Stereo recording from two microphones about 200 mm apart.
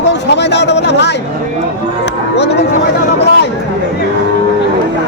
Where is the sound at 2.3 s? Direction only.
60° left (ahead or behind).